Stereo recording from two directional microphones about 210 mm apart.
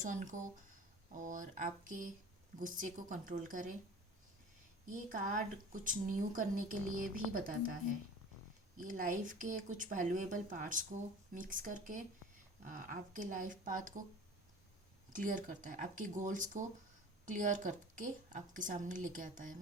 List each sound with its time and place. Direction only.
0.0 s speech: 35° right (ahead or behind)
4.9 s speech: 40° right (ahead or behind)
8.8 s speech: 40° right (ahead or behind)
15.1 s speech: 40° right (ahead or behind)